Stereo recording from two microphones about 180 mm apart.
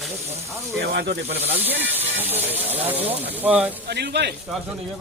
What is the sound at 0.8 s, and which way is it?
Speech, 60° right (ahead or behind).